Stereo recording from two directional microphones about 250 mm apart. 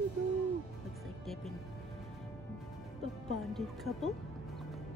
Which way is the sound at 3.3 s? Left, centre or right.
Centre.